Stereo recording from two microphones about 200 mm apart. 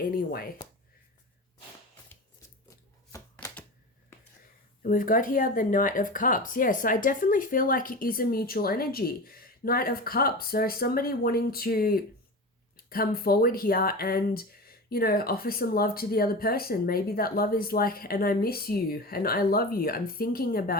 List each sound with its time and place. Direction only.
0.0 s speech: 45° left (ahead or behind)
2.6 s chopping: 15° left (ahead or behind)
4.8 s speech: 45° left (ahead or behind)